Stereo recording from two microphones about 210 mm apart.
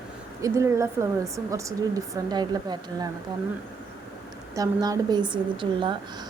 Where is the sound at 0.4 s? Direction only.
15° right (ahead or behind).